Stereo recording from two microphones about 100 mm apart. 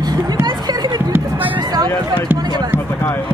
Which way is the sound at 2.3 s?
45° right (ahead or behind).